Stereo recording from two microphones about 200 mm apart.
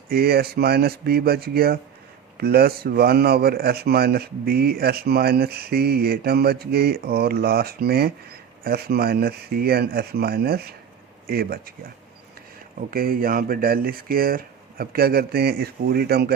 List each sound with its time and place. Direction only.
0.1 s a man's voice: 50° right (ahead or behind)
12.9 s a man's voice: 45° right (ahead or behind)